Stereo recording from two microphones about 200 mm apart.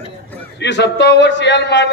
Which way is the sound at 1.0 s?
60° left (ahead or behind).